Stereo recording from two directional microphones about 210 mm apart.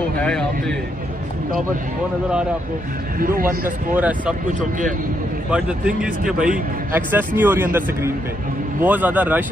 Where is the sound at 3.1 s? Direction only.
45° right (ahead or behind).